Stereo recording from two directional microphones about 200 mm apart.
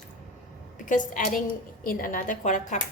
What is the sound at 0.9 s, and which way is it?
A woman's voice, 40° left (ahead or behind).